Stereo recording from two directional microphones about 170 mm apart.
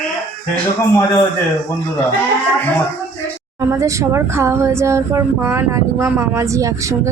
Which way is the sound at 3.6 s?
15° right (ahead or behind).